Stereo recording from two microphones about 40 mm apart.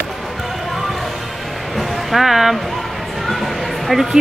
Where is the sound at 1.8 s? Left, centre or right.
Centre.